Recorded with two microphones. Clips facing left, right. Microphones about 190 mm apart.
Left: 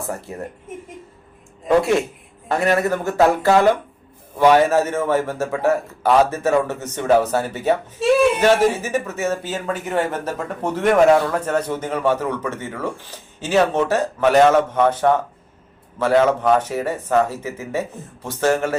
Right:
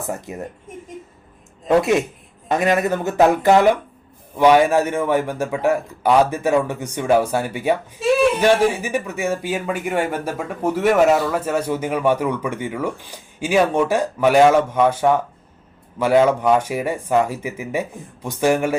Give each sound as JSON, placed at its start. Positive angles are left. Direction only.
{"t": 0.3, "sound": "speech", "side_deg": -20}
{"t": 1.6, "sound": "a man's voice", "side_deg": -20}